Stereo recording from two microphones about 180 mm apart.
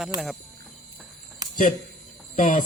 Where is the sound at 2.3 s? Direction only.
45° left (ahead or behind).